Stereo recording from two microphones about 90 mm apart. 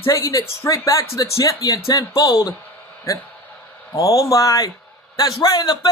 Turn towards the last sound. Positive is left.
turn(degrees=50)  # may be behind; listen again after turning